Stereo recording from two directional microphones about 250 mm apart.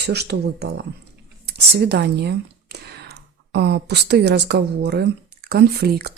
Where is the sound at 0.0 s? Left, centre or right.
Right.